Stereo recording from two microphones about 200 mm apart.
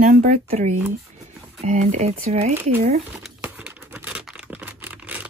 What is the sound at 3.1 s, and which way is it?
Computer keyboard, 5° right (ahead or behind).